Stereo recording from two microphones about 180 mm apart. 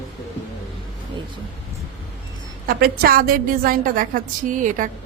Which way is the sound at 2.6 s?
60° right (ahead or behind).